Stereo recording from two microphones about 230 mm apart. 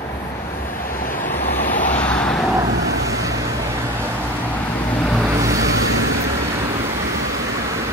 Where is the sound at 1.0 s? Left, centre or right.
Left.